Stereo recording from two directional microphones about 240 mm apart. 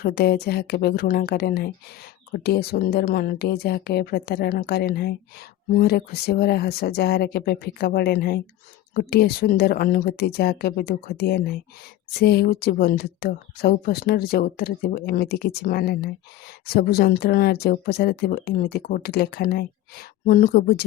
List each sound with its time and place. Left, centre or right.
0.0 s speech: left